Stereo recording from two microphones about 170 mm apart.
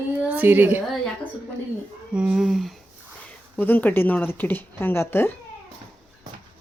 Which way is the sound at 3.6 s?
10° left (ahead or behind).